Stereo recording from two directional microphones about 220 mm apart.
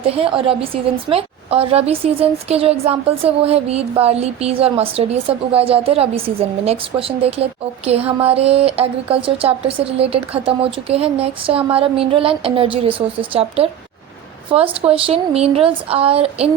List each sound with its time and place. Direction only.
0.0 s speech: 25° right (ahead or behind)